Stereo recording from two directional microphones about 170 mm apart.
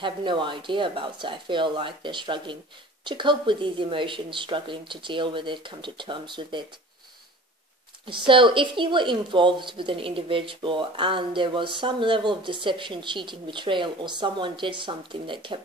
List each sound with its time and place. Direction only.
0.0 s a woman's voice: 30° right (ahead or behind)
8.3 s a woman's voice: 30° right (ahead or behind)